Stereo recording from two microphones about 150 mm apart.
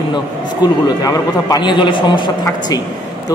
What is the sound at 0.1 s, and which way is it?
A man's voice, 25° left (ahead or behind).